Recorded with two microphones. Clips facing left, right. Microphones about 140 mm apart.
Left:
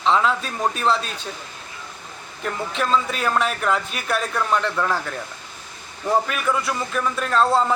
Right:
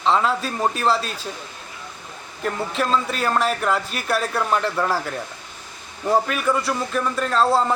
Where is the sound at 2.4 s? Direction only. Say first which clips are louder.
Right 1 dB; centre (ahead or behind).